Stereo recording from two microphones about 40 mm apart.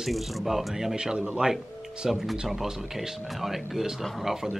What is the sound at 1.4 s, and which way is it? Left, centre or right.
Speech, right.